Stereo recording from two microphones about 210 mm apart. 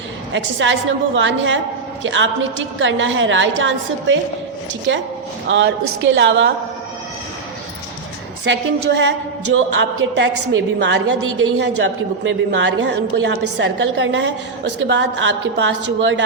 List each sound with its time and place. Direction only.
0.3 s a woman's voice: 65° right (ahead or behind)
5.5 s a woman's voice: 60° right (ahead or behind)
9.0 s a woman's voice: 60° right (ahead or behind)
12.2 s a woman's voice: 65° right (ahead or behind)